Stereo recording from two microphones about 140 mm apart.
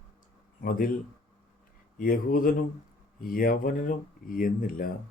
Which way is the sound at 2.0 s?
80° left.